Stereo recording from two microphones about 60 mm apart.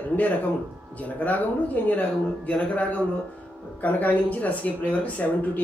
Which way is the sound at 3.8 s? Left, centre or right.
Left.